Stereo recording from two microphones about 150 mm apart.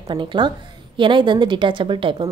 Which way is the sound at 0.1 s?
30° right (ahead or behind).